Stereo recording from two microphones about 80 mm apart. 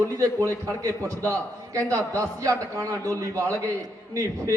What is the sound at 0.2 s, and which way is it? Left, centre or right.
A man's voice, right.